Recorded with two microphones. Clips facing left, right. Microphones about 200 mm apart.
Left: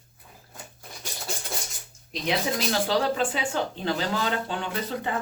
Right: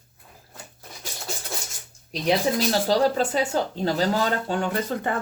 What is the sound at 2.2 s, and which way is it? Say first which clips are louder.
Speech: right 5 dB; 40° right (ahead or behind).